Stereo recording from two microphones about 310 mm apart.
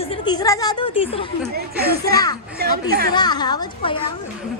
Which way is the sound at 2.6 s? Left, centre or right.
Right.